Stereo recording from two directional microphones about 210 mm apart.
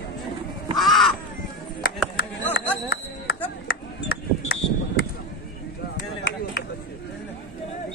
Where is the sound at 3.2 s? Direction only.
45° left (ahead or behind).